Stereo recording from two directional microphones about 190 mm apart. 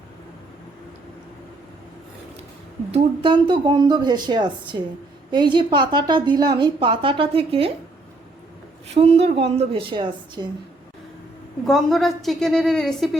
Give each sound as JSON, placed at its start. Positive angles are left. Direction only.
{"t": 2.9, "sound": "a woman's voice", "side_deg": -25}
{"t": 9.0, "sound": "a woman's voice", "side_deg": -35}
{"t": 11.6, "sound": "a woman's voice", "side_deg": 0}